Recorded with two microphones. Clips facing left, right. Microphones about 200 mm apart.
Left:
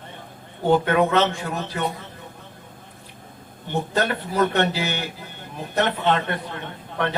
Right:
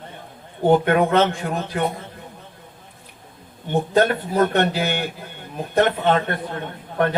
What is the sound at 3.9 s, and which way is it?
A man's voice, 50° right (ahead or behind).